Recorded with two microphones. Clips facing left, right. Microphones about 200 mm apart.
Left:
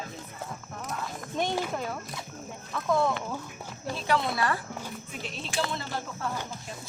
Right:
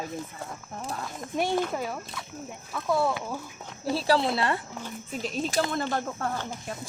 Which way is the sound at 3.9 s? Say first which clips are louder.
Right 4 dB; 30° right (ahead or behind).